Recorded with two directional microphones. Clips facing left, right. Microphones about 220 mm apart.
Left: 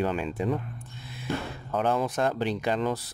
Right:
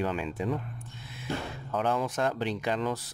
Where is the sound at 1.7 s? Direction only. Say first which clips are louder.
Left 3 dB; 35° left (ahead or behind).